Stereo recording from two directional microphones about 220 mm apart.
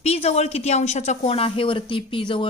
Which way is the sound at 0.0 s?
30° left (ahead or behind).